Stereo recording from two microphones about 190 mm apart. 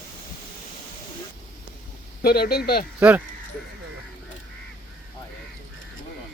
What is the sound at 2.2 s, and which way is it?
Speech, 55° left (ahead or behind).